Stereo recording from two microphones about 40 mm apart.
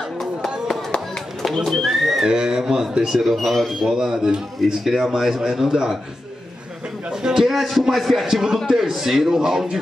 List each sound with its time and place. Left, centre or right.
1.4 s a sound: centre
1.7 s pigeon: centre
2.2 s a man's voice: centre
3.1 s speech: centre
3.8 s a man's voice: centre
7.1 s a man's voice: centre
7.4 s a man's voice: centre